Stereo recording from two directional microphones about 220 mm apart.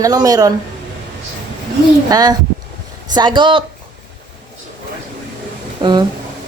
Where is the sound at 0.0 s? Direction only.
15° right (ahead or behind).